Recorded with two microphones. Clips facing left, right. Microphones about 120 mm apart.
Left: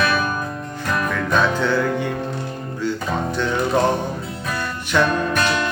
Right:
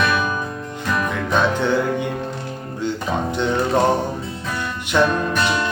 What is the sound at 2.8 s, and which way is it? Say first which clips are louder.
Music: even; 20° right (ahead or behind).